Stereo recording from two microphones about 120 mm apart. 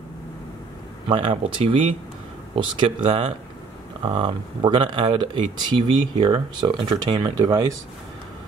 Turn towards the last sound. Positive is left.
turn(degrees=-35)  # may be behind; listen again after turning